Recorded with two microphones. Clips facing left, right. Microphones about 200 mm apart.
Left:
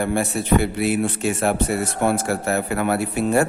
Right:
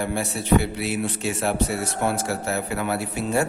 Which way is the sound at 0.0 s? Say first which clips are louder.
Left 5 dB; 55° left (ahead or behind).